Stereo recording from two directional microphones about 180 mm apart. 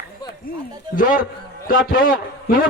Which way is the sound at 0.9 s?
50° left (ahead or behind).